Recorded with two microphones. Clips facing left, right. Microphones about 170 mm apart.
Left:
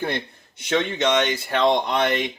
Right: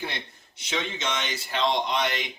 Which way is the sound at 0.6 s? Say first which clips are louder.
Left 9 dB; 55° left (ahead or behind).